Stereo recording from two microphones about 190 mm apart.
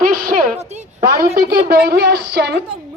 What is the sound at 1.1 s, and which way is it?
A woman's voice, 55° right (ahead or behind).